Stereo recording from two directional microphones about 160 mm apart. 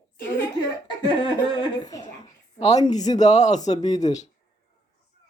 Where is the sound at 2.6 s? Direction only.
45° left (ahead or behind).